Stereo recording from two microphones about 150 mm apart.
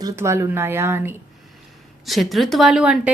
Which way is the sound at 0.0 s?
20° right (ahead or behind).